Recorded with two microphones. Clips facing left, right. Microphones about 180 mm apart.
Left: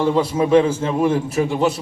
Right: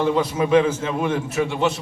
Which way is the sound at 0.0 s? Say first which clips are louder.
Left 2 dB; 30° left (ahead or behind).